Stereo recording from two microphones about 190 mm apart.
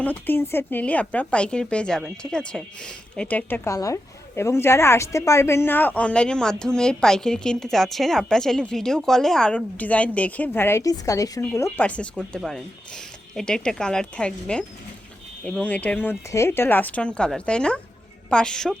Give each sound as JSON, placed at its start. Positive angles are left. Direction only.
{"t": 0.0, "sound": "speech", "side_deg": 10}